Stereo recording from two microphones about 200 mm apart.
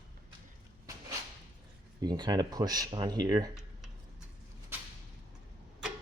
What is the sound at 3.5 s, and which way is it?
Computer keyboard, centre (ahead or behind).